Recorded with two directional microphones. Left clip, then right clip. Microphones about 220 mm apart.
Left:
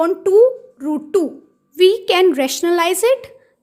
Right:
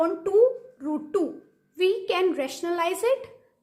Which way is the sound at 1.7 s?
45° left (ahead or behind).